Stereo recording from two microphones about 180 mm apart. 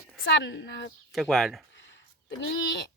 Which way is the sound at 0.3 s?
80° left.